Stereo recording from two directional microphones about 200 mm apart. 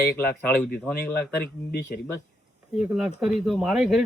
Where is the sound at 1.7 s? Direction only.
50° left (ahead or behind).